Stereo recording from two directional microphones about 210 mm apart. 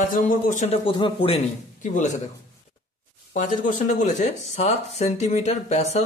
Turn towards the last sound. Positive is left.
turn(degrees=30)  # may be behind; listen again after turning